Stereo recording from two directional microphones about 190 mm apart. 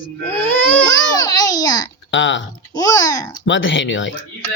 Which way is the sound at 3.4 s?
75° left (ahead or behind).